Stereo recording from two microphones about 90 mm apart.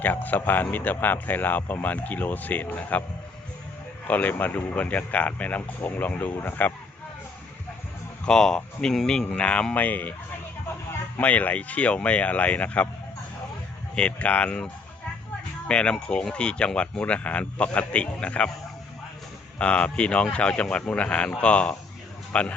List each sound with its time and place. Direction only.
0.0 s speech: 20° left (ahead or behind)
4.0 s speech: 20° left (ahead or behind)
8.2 s speech: 5° left (ahead or behind)
11.2 s speech: 15° left (ahead or behind)
13.9 s speech: 10° left (ahead or behind)
19.5 s a man's voice: 10° left (ahead or behind)